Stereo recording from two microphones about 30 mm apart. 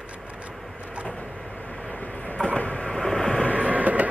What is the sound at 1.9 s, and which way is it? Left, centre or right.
Train, left.